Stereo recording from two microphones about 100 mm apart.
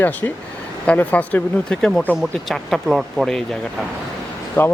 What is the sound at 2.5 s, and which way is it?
Speech, centre (ahead or behind).